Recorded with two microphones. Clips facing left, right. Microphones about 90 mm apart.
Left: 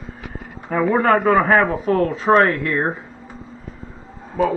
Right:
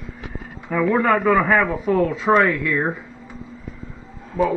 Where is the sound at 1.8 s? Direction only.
45° left (ahead or behind).